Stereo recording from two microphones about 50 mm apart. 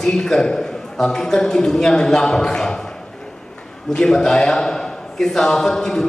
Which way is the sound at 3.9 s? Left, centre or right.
Centre.